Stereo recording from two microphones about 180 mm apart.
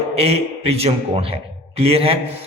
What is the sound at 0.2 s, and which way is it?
A man's voice, 35° right (ahead or behind).